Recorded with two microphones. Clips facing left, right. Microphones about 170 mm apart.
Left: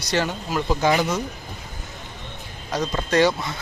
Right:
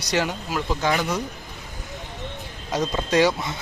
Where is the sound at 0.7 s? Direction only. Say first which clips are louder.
Left 3 dB; 10° left (ahead or behind).